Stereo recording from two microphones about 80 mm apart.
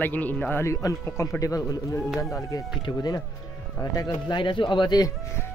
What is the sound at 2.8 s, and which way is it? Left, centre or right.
Speech, left.